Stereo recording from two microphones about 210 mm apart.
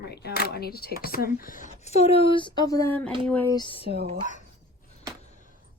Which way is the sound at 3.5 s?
25° left (ahead or behind).